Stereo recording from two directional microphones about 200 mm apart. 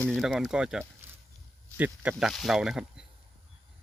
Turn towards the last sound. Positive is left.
turn(degrees=0)  # may be behind; listen again after turning